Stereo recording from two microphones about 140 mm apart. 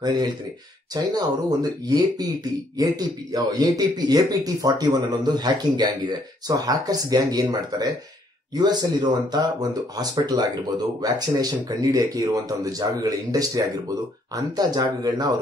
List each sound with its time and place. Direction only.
0.0 s a man's voice: 30° right (ahead or behind)